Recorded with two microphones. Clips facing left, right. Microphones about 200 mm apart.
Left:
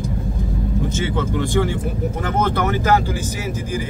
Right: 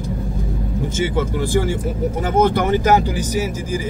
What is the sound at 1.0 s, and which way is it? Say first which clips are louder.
Speech: right 5 dB; 5° right (ahead or behind).